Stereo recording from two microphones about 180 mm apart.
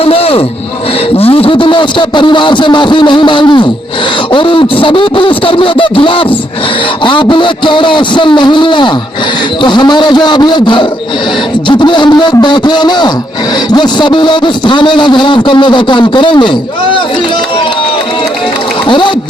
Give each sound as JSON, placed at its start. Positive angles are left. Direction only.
{"t": 0.0, "sound": "a sound", "side_deg": 30}
{"t": 1.2, "sound": "a man's voice", "side_deg": 30}
{"t": 18.9, "sound": "a man's voice", "side_deg": 25}